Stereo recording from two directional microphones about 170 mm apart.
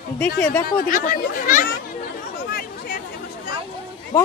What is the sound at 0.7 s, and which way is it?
Speech, 55° left (ahead or behind).